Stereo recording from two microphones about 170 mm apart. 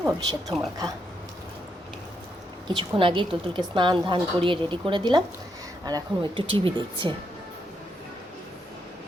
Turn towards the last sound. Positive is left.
turn(degrees=-30)  # may be behind; listen again after turning